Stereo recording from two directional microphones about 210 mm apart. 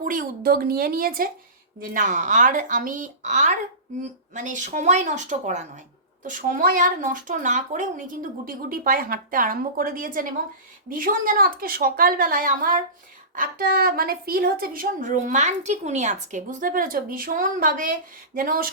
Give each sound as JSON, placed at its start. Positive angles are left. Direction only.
{"t": 0.0, "sound": "a woman's voice", "side_deg": -40}